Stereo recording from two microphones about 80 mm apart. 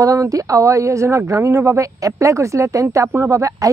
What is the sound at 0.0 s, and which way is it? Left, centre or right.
Speech, right.